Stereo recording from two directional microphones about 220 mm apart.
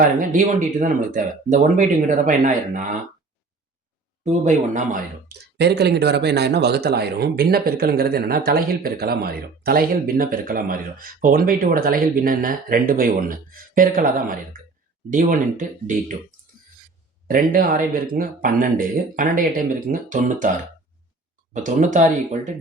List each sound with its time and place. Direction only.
0.0 s speech: 35° right (ahead or behind)
4.2 s speech: 30° right (ahead or behind)
5.5 s speech: 50° right (ahead or behind)
17.2 s speech: 40° right (ahead or behind)
21.5 s speech: 35° right (ahead or behind)